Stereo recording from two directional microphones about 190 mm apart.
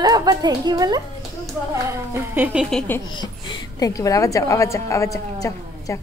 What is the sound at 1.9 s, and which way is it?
Speech, 10° right (ahead or behind).